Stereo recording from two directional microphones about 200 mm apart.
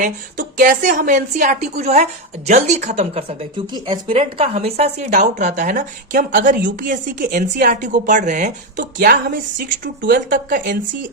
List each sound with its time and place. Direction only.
0.0 s a woman's voice: 40° right (ahead or behind)